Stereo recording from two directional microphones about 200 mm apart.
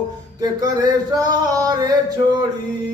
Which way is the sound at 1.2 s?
20° right (ahead or behind).